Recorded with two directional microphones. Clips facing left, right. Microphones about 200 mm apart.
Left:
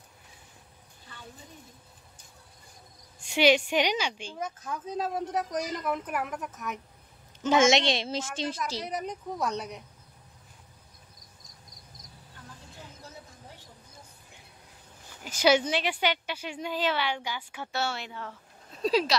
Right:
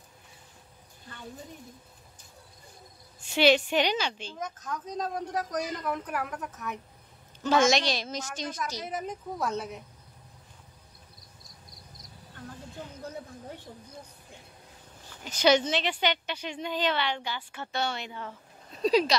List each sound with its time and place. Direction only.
3.2 s a woman's voice: 15° left (ahead or behind)
7.4 s a woman's voice: 20° left (ahead or behind)
8.8 s speech: centre (ahead or behind)
15.2 s a woman's voice: 10° left (ahead or behind)